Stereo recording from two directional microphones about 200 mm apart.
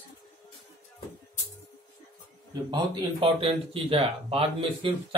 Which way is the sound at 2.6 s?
25° right (ahead or behind).